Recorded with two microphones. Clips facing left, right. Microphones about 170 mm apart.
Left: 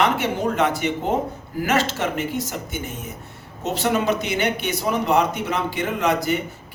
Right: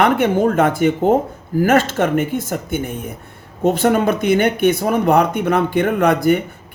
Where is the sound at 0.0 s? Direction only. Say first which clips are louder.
Right 6 dB; 55° right (ahead or behind).